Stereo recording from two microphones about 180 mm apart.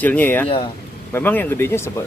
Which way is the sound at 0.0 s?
10° left (ahead or behind).